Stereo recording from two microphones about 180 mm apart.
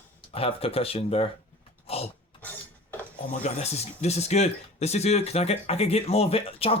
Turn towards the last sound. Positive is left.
turn(degrees=30)  # may be behind; listen again after turning